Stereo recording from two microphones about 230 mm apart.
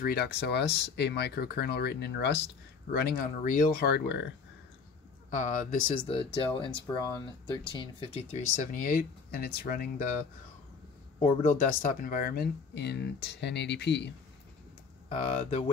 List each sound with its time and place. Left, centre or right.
0.0 s speech: left
5.3 s speech: left
11.1 s speech: left
15.0 s speech: left